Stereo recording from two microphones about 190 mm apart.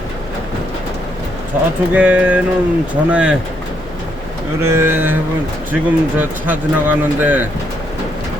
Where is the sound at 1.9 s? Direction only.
5° right (ahead or behind).